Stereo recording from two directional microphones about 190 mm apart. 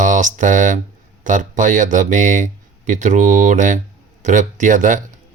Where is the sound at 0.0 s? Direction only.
40° right (ahead or behind).